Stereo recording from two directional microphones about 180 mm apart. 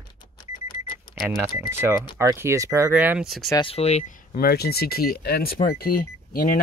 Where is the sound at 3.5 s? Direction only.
30° left (ahead or behind).